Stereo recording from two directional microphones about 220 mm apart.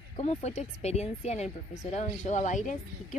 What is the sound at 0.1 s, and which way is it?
Speech, 30° left (ahead or behind).